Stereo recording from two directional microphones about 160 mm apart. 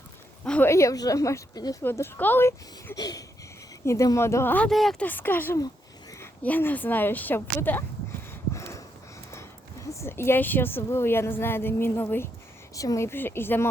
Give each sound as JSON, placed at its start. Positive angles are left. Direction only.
{"t": 0.4, "sound": "speech", "side_deg": 5}
{"t": 0.7, "sound": "speech", "side_deg": 20}
{"t": 5.6, "sound": "a sound", "side_deg": 20}
{"t": 6.4, "sound": "speech", "side_deg": 10}
{"t": 8.3, "sound": "a sound", "side_deg": 15}
{"t": 9.3, "sound": "speech", "side_deg": 15}